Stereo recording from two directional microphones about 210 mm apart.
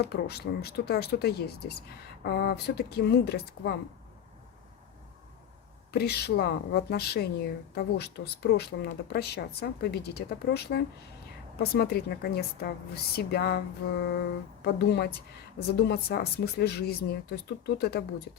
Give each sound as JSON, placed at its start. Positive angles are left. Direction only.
{"t": 0.0, "sound": "speech", "side_deg": 50}
{"t": 5.9, "sound": "speech", "side_deg": 50}
{"t": 14.6, "sound": "speech", "side_deg": 50}